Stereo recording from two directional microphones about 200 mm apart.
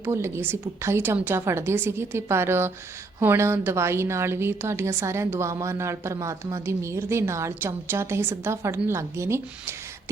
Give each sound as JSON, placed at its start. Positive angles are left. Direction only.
{"t": 0.0, "sound": "a woman's voice", "side_deg": -15}